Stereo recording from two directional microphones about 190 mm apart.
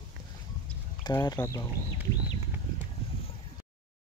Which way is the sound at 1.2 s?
20° left (ahead or behind).